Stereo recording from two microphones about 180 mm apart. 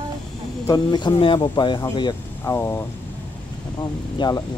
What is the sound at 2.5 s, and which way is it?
Speech, 10° left (ahead or behind).